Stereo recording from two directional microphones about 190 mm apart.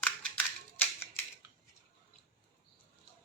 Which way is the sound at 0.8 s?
10° left (ahead or behind).